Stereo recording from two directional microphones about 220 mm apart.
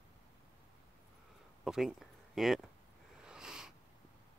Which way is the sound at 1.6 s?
Centre (ahead or behind).